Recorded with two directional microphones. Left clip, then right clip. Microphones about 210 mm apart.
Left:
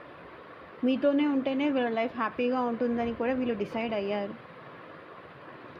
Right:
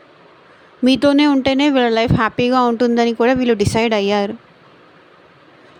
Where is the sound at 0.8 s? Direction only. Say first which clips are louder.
Right 13 dB; 55° right (ahead or behind).